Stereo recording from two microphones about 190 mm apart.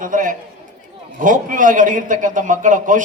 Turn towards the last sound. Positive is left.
turn(degrees=-45)  # may be behind; listen again after turning